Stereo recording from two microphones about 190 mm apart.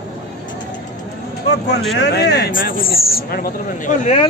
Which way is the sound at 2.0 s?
60° left (ahead or behind).